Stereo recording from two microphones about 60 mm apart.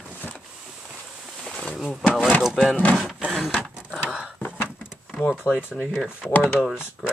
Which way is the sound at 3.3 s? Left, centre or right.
Centre.